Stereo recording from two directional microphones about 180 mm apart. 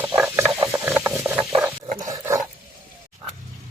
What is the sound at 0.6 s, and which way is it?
Ratchet, 10° right (ahead or behind).